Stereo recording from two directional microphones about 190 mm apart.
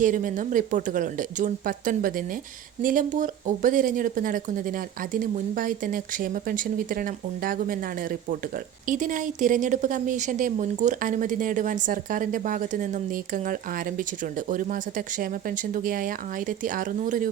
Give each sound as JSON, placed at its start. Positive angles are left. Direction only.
{"t": 0.0, "sound": "speech", "side_deg": -45}
{"t": 8.9, "sound": "speech", "side_deg": -45}